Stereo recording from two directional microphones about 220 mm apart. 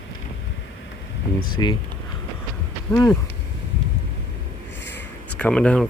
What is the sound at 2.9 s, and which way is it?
Speech, 10° left (ahead or behind).